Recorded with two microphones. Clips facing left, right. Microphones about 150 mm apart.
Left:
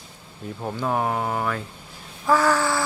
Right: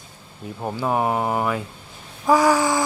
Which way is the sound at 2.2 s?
15° right (ahead or behind).